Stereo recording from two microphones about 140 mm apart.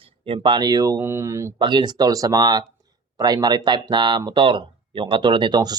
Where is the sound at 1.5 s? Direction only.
30° right (ahead or behind).